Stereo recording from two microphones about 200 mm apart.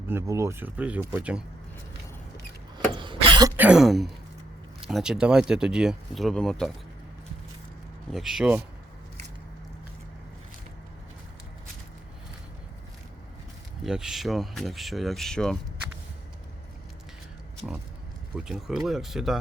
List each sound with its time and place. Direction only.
0.1 s speech: 15° right (ahead or behind)
2.7 s a sound: 25° right (ahead or behind)
3.6 s speech: 5° right (ahead or behind)
8.1 s speech: centre (ahead or behind)
13.8 s speech: centre (ahead or behind)
18.3 s speech: 5° right (ahead or behind)